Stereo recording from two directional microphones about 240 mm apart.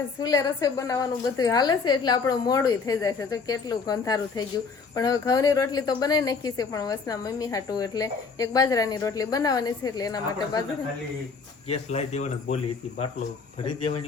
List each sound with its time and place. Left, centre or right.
0.2 s a woman's voice: centre
11.7 s speech: left